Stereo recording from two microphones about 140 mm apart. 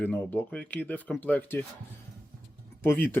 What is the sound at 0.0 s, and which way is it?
Speech, 10° left (ahead or behind).